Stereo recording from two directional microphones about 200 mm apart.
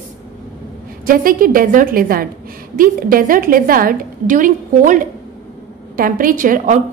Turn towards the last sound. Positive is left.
turn(degrees=-40)  # may be behind; listen again after turning